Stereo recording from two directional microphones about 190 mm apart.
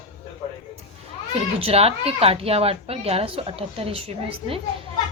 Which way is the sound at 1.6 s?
30° right (ahead or behind).